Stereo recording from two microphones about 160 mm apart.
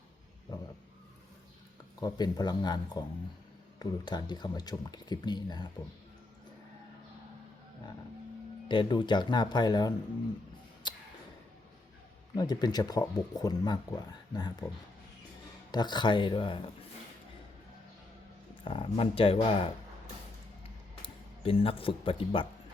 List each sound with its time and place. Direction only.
0.5 s vehicle: 25° left (ahead or behind)
2.0 s speech: 25° left (ahead or behind)
8.6 s speech: 30° left (ahead or behind)
10.8 s a sound: 30° left (ahead or behind)
12.4 s speech: 25° left (ahead or behind)
15.7 s speech: 25° left (ahead or behind)
18.6 s speech: 30° left (ahead or behind)
20.9 s speech: 35° left (ahead or behind)